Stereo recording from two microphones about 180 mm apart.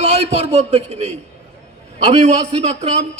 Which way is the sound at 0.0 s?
35° right (ahead or behind).